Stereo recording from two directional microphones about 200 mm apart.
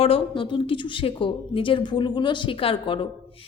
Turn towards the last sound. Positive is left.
turn(degrees=25)  # may be behind; listen again after turning